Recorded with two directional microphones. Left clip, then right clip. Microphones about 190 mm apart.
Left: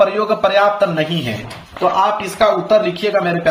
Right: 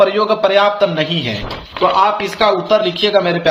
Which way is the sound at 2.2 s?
30° right (ahead or behind).